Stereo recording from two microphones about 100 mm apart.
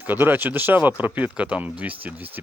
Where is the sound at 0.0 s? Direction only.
20° right (ahead or behind).